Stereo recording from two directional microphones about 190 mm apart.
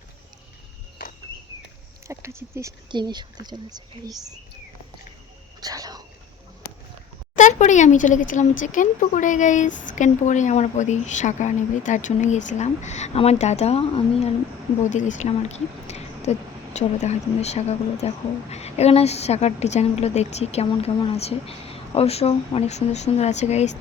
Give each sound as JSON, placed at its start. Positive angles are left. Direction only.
{"t": 2.0, "sound": "speech", "side_deg": -15}
{"t": 5.5, "sound": "whispering", "side_deg": -20}
{"t": 7.3, "sound": "speech", "side_deg": 40}